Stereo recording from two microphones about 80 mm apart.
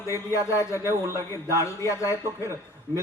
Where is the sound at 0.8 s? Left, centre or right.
Right.